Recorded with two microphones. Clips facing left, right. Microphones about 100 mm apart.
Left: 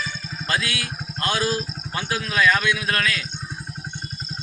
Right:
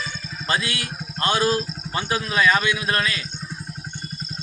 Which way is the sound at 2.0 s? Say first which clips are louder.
Right 1 dB; 20° right (ahead or behind).